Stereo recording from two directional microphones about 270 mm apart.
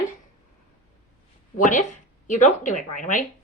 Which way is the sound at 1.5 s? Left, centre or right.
Left.